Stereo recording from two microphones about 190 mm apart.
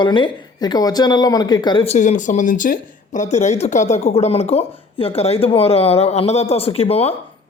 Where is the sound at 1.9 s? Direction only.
40° left (ahead or behind).